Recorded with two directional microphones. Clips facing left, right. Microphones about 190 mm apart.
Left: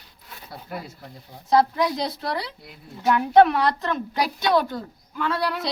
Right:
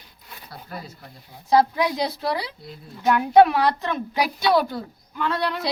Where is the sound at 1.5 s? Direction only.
5° right (ahead or behind).